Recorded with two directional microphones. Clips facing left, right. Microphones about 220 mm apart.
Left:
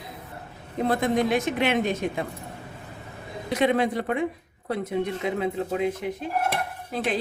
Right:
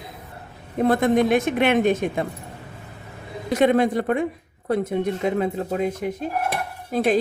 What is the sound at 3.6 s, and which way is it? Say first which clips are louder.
Speech: right 5 dB; 45° right (ahead or behind).